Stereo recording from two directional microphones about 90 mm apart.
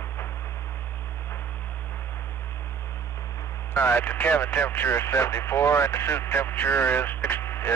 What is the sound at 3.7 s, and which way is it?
Speech, 25° left (ahead or behind).